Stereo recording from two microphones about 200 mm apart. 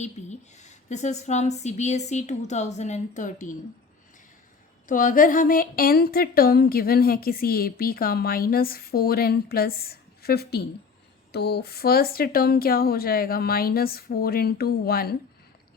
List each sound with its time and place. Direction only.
0.0 s speech: 35° left (ahead or behind)
4.9 s speech: 40° left (ahead or behind)